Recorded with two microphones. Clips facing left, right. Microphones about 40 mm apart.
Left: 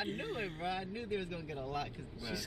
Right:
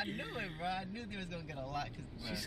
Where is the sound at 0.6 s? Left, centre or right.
Centre.